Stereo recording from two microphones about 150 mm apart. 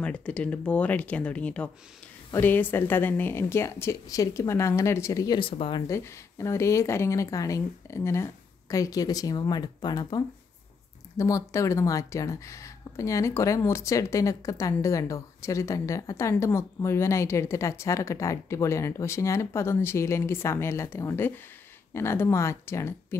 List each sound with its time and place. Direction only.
0.0 s a woman's voice: 5° left (ahead or behind)
5.4 s speech: 35° left (ahead or behind)
5.9 s a woman's voice: 20° left (ahead or behind)